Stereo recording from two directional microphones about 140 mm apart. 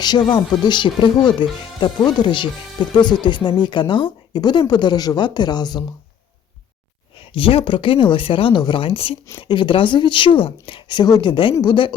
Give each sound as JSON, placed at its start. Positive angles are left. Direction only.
{"t": 0.0, "sound": "speech", "side_deg": 30}
{"t": 7.3, "sound": "speech", "side_deg": 40}